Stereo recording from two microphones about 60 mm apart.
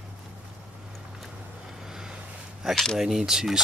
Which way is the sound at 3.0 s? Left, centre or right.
Centre.